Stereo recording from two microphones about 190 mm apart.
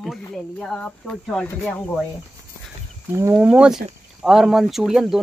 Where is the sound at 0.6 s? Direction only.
5° left (ahead or behind).